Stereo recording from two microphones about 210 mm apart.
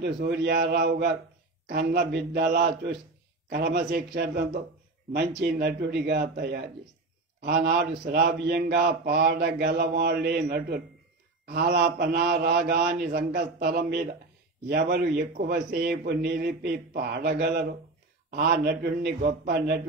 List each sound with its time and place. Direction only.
0.0 s a man's voice: 50° right (ahead or behind)